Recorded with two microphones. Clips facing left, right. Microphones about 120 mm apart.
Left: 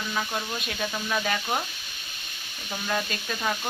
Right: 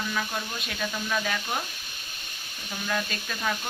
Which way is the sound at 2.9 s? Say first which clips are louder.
Left 1 dB; 10° left (ahead or behind).